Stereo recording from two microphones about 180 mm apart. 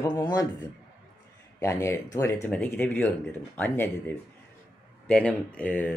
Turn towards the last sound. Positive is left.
turn(degrees=10)  # may be behind; listen again after turning